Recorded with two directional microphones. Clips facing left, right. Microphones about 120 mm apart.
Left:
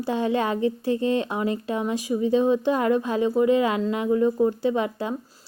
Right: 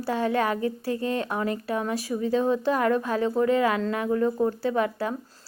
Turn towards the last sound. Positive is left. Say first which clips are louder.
# left 1 dB
turn(degrees=20)  # may be behind; listen again after turning